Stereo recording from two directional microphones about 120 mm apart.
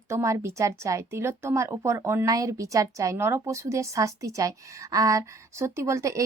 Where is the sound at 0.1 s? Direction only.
25° right (ahead or behind).